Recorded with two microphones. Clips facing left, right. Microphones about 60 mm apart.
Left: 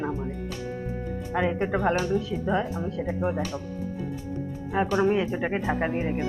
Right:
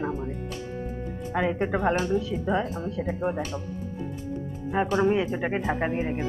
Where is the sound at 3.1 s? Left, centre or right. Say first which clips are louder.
Even; centre.